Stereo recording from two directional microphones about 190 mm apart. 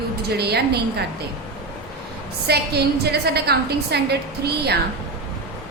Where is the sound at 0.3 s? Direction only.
60° right (ahead or behind).